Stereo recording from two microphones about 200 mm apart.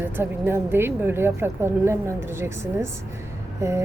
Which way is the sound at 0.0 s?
10° right (ahead or behind).